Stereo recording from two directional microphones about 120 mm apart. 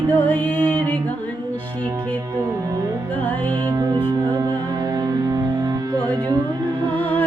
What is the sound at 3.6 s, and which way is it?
Music, 30° right (ahead or behind).